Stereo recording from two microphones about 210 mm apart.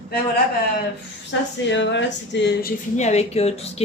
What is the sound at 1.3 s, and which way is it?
Speech, 60° left (ahead or behind).